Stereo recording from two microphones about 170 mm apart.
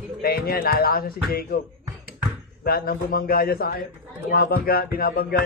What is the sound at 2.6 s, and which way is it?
Music, 60° left (ahead or behind).